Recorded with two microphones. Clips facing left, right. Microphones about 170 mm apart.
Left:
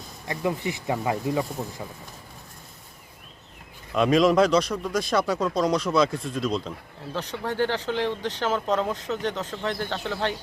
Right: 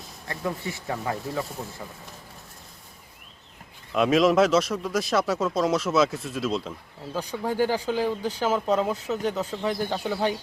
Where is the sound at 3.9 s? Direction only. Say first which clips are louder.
Even; centre (ahead or behind).